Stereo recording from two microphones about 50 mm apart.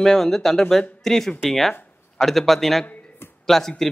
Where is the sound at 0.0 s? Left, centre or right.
Centre.